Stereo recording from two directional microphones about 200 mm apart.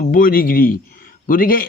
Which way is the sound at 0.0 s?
45° left (ahead or behind).